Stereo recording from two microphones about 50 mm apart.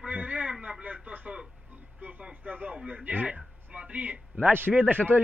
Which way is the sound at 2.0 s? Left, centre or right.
Right.